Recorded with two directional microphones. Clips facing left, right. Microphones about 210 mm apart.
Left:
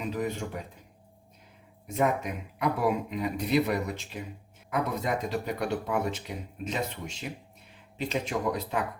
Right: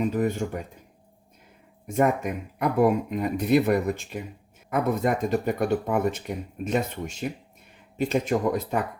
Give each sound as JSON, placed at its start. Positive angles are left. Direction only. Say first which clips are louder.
{"t": 0.0, "sound": "speech", "louder": "right 7 dB", "side_deg": -50}
{"t": 1.9, "sound": "speech", "louder": "right 4 dB", "side_deg": -45}